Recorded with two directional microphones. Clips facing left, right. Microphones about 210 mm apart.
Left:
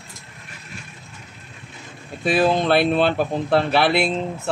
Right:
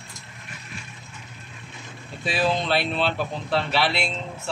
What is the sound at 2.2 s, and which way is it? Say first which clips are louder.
Speech: left 6 dB; 55° left (ahead or behind).